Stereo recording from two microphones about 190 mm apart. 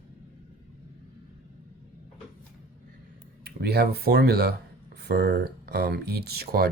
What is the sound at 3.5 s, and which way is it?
Speech, 55° right (ahead or behind).